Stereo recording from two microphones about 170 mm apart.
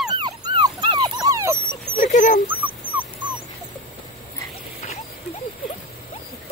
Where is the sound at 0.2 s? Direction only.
25° right (ahead or behind).